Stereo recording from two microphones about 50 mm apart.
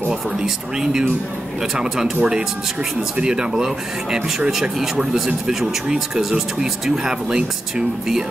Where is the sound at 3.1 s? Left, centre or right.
Centre.